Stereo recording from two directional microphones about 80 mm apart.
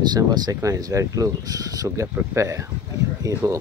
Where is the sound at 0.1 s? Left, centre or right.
Right.